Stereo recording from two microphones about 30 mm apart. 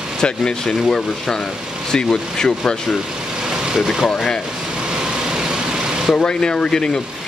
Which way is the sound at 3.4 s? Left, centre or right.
Right.